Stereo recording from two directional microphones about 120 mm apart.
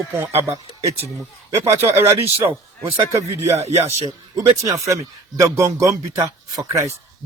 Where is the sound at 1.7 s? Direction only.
55° right (ahead or behind).